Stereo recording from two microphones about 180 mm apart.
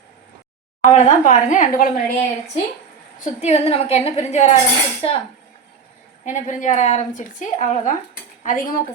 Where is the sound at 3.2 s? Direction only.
40° left (ahead or behind).